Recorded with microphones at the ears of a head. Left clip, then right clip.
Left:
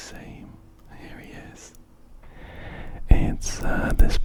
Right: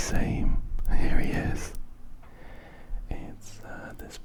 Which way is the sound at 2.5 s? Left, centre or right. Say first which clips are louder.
Left 12 dB; left.